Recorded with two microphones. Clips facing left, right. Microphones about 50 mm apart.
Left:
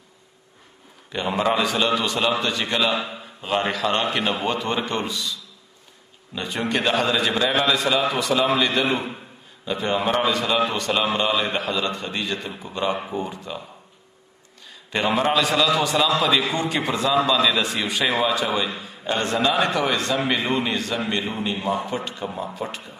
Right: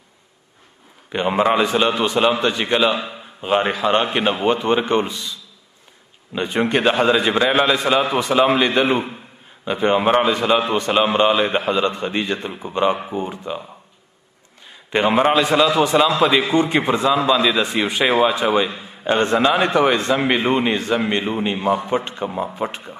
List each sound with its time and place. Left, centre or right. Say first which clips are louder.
1.1 s a man's voice: right 5 dB; right
6.3 s a man's voice: right 6 dB; right
14.7 s a sound: right 6 dB; right
15.0 s a man's voice: right 4 dB; right